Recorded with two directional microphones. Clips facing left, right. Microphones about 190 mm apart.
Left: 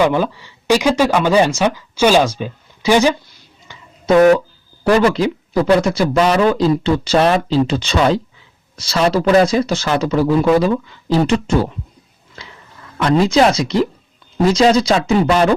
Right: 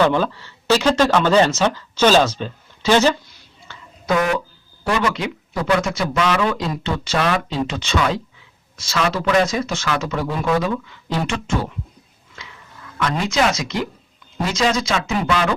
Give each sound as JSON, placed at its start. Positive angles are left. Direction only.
{"t": 0.0, "sound": "speech", "side_deg": 10}
{"t": 3.7, "sound": "a sound", "side_deg": 15}
{"t": 4.2, "sound": "speech", "side_deg": 40}
{"t": 12.4, "sound": "dog", "side_deg": 35}
{"t": 13.0, "sound": "speech", "side_deg": 35}